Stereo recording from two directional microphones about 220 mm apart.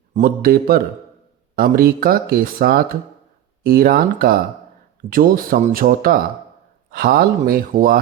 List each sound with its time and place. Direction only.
0.1 s speech: 40° right (ahead or behind)